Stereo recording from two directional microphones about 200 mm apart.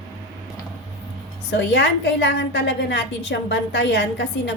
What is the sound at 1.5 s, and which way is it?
A woman's voice, 60° left (ahead or behind).